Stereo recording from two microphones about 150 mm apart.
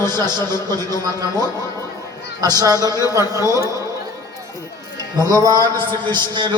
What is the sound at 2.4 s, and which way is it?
A man's voice, 25° right (ahead or behind).